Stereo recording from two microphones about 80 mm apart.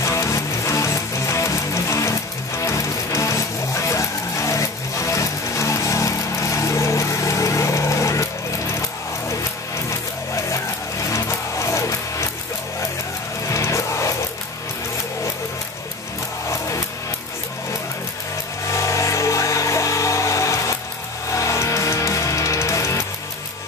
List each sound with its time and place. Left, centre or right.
0.0 s music: left
9.8 s vehicle: left
13.5 s music: left
18.7 s a sound: left
21.3 s music: left